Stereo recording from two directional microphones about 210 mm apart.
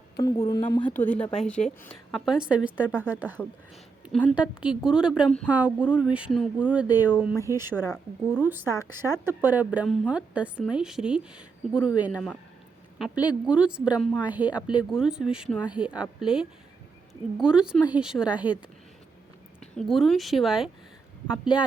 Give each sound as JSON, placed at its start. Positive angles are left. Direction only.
{"t": 0.4, "sound": "a woman's voice", "side_deg": 15}
{"t": 4.0, "sound": "a woman's voice", "side_deg": 0}
{"t": 19.7, "sound": "a woman's voice", "side_deg": 0}